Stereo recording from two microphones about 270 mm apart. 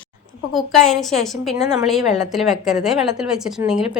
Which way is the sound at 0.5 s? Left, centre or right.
Centre.